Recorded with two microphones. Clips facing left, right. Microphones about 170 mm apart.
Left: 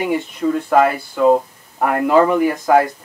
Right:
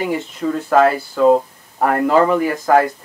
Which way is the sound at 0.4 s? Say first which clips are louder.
Right 1 dB; centre (ahead or behind).